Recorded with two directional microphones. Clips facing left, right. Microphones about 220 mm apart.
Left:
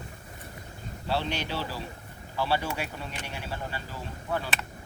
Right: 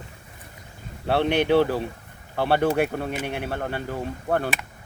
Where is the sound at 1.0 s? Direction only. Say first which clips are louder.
Right 10 dB; 60° right (ahead or behind).